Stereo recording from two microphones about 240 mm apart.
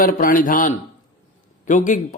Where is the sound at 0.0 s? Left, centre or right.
Left.